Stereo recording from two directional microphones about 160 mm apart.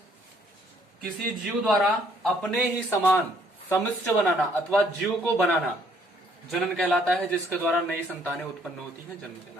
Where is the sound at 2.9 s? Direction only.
15° left (ahead or behind).